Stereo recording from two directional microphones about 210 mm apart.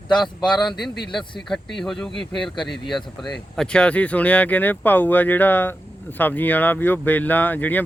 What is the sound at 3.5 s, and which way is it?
Speech, 5° left (ahead or behind).